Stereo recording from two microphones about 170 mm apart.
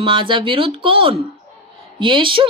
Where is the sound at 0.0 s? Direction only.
30° right (ahead or behind).